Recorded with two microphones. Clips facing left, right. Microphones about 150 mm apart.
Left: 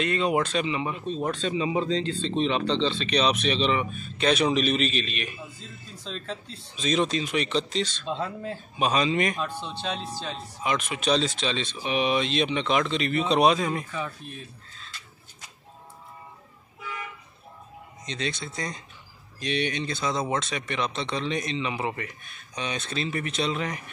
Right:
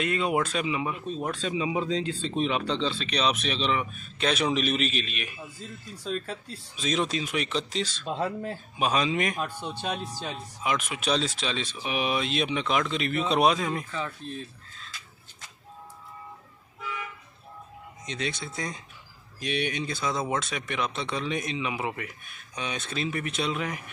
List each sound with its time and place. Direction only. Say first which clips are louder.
0.0 s speech: left 2 dB; 5° right (ahead or behind)
5.9 s speech: right 6 dB; 50° right (ahead or behind)
6.2 s speech: left 1 dB; 5° right (ahead or behind)
9.9 s speech: left 1 dB; 15° right (ahead or behind); by 14.3 s 10° left (ahead or behind)
18.0 s speech: left 1 dB; 5° right (ahead or behind)